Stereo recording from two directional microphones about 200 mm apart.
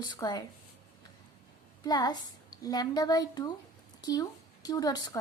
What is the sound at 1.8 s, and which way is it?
A woman's voice, 20° left (ahead or behind).